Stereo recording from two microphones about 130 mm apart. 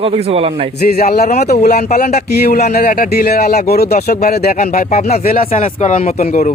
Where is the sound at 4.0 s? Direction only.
90° left.